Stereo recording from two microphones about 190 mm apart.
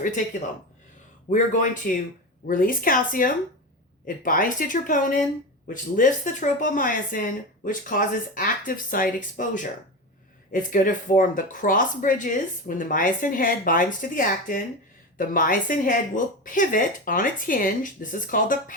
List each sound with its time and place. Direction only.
1.3 s speech: 45° left (ahead or behind)